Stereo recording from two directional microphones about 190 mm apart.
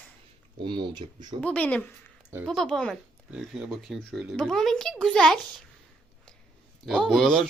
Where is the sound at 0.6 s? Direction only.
25° right (ahead or behind).